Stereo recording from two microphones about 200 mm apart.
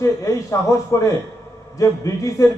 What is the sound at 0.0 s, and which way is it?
A man's voice, 15° left (ahead or behind).